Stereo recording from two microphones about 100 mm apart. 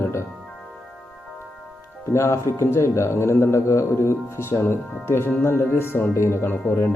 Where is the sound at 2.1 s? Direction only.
30° left (ahead or behind).